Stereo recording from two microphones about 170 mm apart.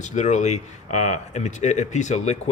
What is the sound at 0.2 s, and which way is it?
A man's voice, 45° left (ahead or behind).